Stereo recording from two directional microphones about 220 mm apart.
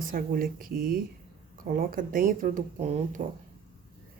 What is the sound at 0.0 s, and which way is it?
Speech, 40° right (ahead or behind).